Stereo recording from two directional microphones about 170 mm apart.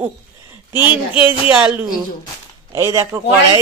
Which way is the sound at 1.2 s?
10° right (ahead or behind).